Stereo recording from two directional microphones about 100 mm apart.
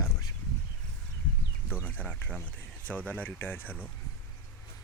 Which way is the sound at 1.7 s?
20° left (ahead or behind).